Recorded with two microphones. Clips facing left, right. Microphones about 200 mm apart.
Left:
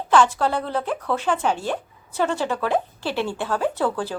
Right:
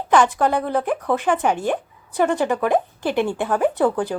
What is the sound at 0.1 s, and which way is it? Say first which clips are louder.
A woman's voice: right 2 dB; 15° right (ahead or behind).